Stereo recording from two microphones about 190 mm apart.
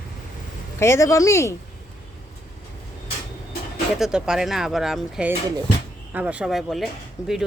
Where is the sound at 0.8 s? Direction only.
15° left (ahead or behind).